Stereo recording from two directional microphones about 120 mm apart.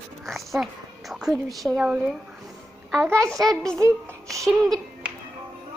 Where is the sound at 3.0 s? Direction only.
20° right (ahead or behind).